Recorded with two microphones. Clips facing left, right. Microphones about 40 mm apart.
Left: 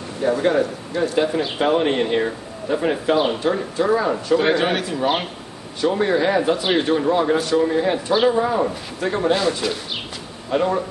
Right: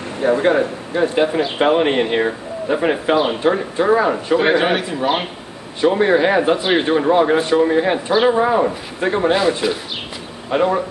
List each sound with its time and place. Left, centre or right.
0.2 s a man's voice: right